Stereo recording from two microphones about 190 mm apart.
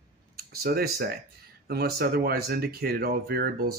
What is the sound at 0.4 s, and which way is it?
Speech, 55° right (ahead or behind).